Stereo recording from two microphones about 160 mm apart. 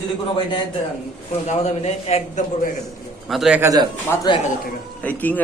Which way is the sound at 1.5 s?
40° left (ahead or behind).